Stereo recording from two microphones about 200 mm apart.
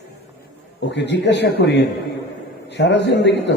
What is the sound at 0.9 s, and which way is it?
A man's voice, 60° left (ahead or behind).